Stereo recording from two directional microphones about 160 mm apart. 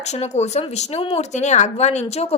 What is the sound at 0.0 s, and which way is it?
Speech, 45° left (ahead or behind).